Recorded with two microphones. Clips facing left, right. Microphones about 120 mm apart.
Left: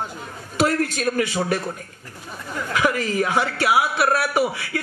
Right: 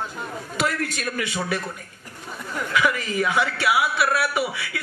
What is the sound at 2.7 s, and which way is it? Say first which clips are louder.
A man's voice: left 2 dB; 40° left (ahead or behind).